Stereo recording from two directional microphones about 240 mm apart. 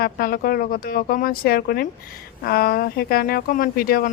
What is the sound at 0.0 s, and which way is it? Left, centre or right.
Speech, left.